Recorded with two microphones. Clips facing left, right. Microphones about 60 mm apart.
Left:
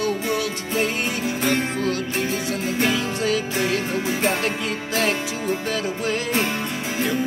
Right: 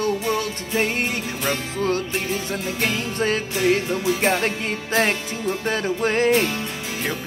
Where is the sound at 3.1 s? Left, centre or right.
Right.